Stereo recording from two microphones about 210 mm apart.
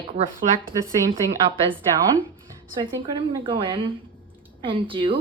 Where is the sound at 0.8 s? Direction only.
40° right (ahead or behind).